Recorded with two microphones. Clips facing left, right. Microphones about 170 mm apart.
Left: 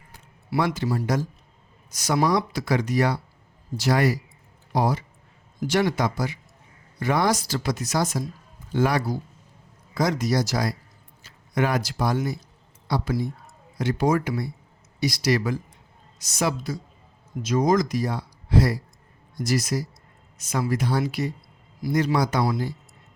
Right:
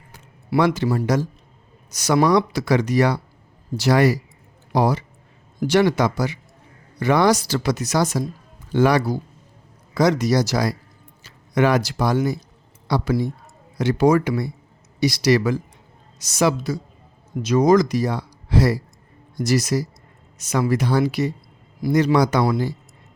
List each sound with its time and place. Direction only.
0.1 s speech: 80° right
12.9 s speech: 75° right (ahead or behind)
17.4 s speech: 70° right (ahead or behind)
21.8 s speech: 65° right (ahead or behind); by 22.7 s 85° right